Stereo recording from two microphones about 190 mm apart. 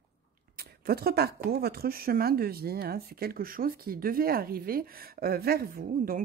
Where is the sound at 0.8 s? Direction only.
55° right (ahead or behind).